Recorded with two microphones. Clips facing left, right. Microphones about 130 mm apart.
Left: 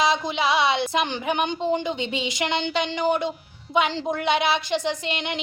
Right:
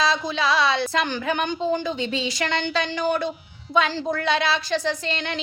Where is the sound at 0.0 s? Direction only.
20° left (ahead or behind).